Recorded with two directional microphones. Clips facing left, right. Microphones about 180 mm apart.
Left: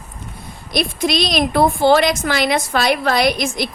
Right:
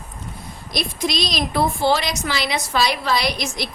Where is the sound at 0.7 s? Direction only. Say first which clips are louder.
Left 5 dB; 60° left (ahead or behind).